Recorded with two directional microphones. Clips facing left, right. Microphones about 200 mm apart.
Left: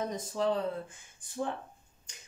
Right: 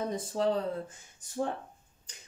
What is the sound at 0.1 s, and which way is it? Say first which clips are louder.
Speech: right 2 dB; 35° right (ahead or behind).